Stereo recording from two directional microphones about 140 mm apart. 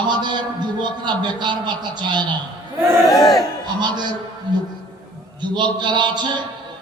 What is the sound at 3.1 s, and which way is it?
Speech, 25° left (ahead or behind).